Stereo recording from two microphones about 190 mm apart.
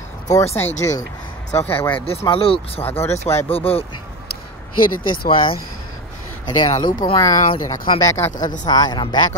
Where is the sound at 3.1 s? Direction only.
35° left (ahead or behind).